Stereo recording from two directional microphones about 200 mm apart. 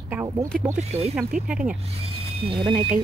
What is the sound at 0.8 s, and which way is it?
Speech, 30° right (ahead or behind).